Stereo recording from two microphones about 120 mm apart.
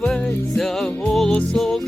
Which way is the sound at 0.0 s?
5° left (ahead or behind).